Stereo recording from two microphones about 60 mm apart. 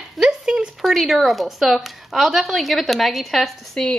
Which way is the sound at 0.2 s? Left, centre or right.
Centre.